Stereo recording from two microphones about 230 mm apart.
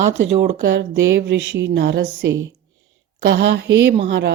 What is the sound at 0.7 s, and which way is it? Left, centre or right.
Speech, right.